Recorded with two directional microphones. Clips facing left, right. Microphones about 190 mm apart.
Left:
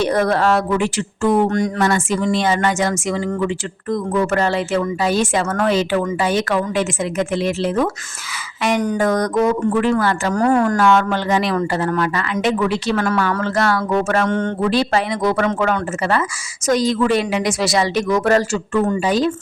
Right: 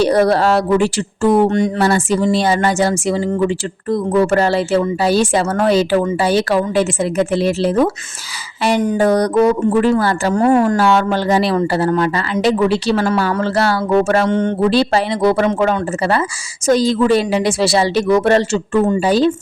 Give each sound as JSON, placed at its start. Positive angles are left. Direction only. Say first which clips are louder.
{"t": 0.0, "sound": "speech", "louder": "right 4 dB", "side_deg": -35}